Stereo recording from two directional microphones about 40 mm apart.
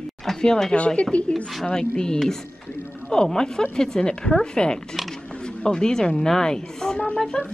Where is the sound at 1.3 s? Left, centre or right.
Centre.